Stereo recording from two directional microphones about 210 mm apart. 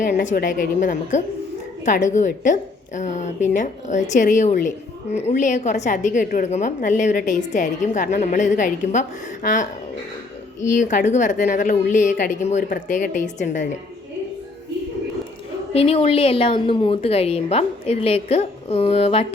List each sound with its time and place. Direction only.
0.0 s a woman's voice: 35° left (ahead or behind)
10.8 s a woman's voice: 35° left (ahead or behind)
15.7 s a woman's voice: 30° left (ahead or behind)